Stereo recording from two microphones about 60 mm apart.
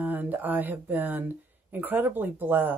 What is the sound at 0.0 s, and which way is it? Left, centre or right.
Speech, right.